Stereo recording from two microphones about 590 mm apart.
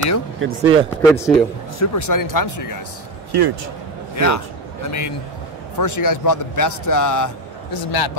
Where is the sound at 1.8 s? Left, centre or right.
Left.